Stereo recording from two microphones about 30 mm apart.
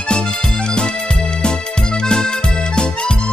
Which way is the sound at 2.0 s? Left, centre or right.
Left.